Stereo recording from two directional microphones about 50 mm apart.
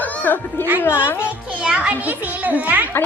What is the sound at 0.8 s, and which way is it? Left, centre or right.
Speech, left.